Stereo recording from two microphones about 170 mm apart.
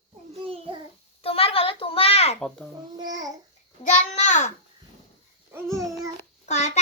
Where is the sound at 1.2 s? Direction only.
35° left (ahead or behind).